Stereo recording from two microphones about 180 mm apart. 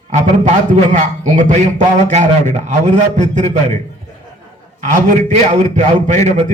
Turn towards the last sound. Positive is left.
turn(degrees=-40)  # may be behind; listen again after turning